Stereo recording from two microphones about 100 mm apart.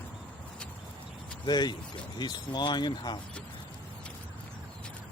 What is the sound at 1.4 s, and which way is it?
Speech, 45° left (ahead or behind).